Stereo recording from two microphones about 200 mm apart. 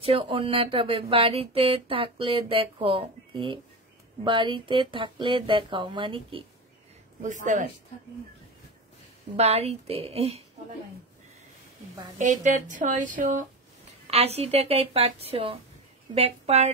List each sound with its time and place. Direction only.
0.0 s speech: 30° right (ahead or behind)
7.4 s a woman's voice: 40° right (ahead or behind)
9.4 s a woman's voice: 30° right (ahead or behind)
12.2 s a woman's voice: 40° right (ahead or behind)